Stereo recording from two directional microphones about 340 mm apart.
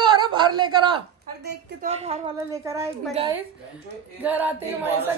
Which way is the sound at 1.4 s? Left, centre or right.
Right.